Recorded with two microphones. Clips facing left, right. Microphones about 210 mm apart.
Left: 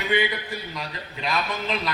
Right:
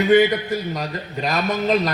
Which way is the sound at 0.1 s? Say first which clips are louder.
Right 9 dB; 45° right (ahead or behind).